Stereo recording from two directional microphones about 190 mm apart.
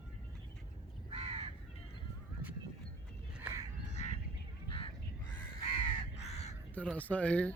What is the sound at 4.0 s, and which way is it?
Goose, 40° left (ahead or behind).